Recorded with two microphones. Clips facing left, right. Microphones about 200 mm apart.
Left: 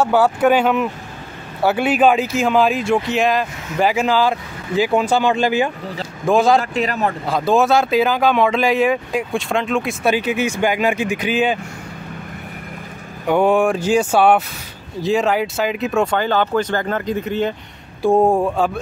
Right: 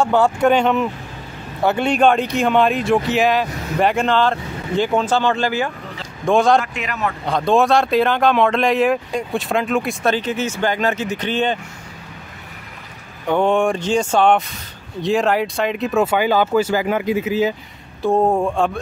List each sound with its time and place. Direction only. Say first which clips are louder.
0.0 s speech: left 1 dB; 5° left (ahead or behind)
6.2 s speech: even; 5° left (ahead or behind)
6.6 s speech: left 4 dB; 35° left (ahead or behind)
7.2 s speech: right 1 dB; 5° left (ahead or behind)
10.0 s speech: left 2 dB; 10° left (ahead or behind)
13.3 s speech: left 2 dB; 5° left (ahead or behind)
18.0 s speech: left 2 dB; 10° left (ahead or behind)